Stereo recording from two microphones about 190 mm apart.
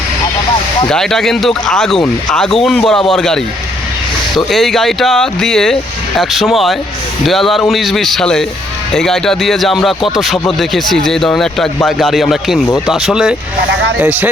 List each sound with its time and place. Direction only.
0.9 s speech: 5° left (ahead or behind)